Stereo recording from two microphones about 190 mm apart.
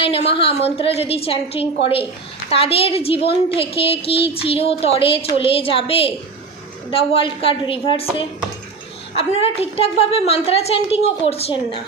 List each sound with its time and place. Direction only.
0.0 s a woman's voice: 30° left (ahead or behind)
9.1 s a woman's voice: 30° left (ahead or behind)